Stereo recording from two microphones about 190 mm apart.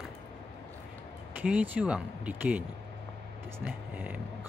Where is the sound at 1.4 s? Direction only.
5° right (ahead or behind).